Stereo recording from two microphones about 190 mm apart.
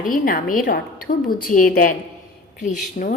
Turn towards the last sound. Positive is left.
turn(degrees=50)  # may be behind; listen again after turning